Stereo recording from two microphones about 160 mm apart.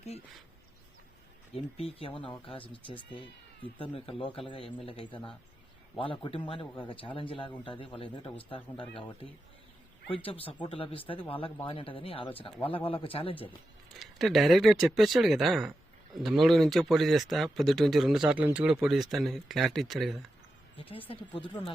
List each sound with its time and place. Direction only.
1.5 s a man's voice: 40° left (ahead or behind)
10.1 s a man's voice: 35° left (ahead or behind)
14.0 s speech: centre (ahead or behind)
20.7 s a man's voice: 35° left (ahead or behind)